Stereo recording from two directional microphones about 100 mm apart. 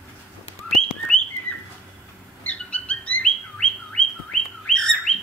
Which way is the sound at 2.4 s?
15° left (ahead or behind).